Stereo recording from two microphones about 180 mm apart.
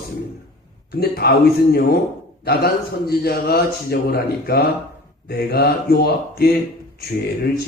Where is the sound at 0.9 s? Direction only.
60° left (ahead or behind).